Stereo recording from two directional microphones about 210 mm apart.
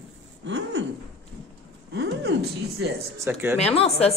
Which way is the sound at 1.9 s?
50° right (ahead or behind).